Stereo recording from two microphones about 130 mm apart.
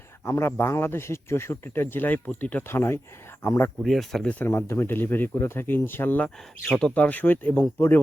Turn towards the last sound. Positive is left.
turn(degrees=15)  # may be behind; listen again after turning